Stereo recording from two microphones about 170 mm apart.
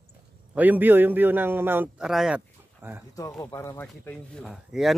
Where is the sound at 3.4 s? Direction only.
20° left (ahead or behind).